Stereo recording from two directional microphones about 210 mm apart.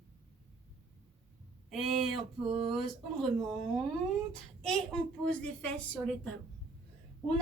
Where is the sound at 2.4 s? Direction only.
25° right (ahead or behind).